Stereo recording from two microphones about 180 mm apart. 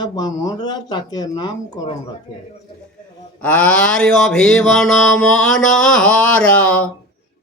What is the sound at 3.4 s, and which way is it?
Mantra, 5° left (ahead or behind).